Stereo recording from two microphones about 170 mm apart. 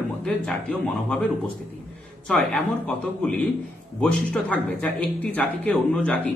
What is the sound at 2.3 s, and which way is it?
Speech, 5° left (ahead or behind).